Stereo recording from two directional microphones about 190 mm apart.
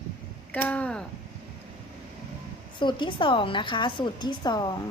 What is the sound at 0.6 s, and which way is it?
Speech, 5° left (ahead or behind).